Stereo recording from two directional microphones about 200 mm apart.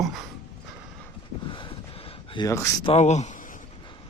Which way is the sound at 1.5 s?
25° left (ahead or behind).